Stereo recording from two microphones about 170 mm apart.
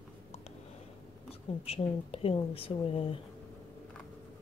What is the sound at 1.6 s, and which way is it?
Speech, 35° left (ahead or behind).